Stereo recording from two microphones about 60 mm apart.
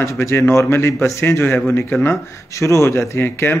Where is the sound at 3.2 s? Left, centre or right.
Left.